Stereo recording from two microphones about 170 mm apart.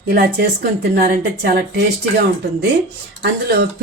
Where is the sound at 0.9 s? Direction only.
60° right (ahead or behind).